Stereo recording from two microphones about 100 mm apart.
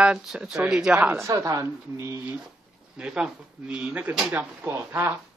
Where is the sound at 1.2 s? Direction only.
35° right (ahead or behind).